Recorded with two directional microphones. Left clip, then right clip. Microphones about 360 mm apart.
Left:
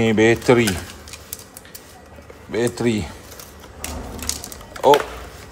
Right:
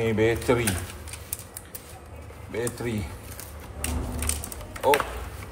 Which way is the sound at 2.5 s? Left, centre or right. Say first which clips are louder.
Left 9 dB; left.